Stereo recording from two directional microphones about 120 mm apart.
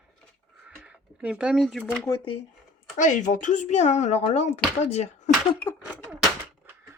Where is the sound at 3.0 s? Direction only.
90° left; by 5.1 s 65° left (ahead or behind).